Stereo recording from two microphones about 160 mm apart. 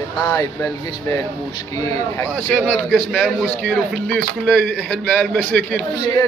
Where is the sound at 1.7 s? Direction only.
20° left (ahead or behind).